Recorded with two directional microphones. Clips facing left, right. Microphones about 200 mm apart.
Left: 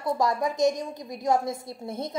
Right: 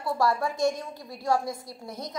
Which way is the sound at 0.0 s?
20° left (ahead or behind).